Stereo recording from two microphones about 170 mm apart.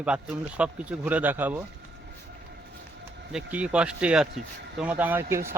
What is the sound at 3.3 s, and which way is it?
Speech, 5° right (ahead or behind).